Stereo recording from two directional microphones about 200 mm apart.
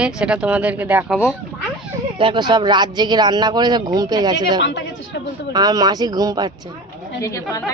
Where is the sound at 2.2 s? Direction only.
25° right (ahead or behind).